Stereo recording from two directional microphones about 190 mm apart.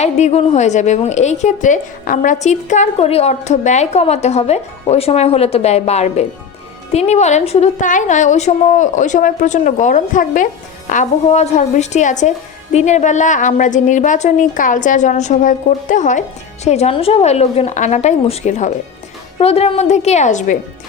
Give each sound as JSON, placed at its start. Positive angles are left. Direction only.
{"t": 0.0, "sound": "a woman's voice", "side_deg": 35}